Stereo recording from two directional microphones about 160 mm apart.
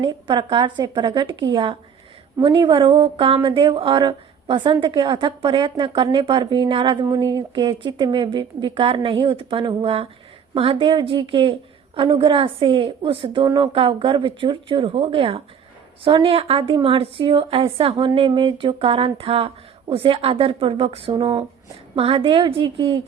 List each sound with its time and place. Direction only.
0.0 s a woman's voice: 30° right (ahead or behind)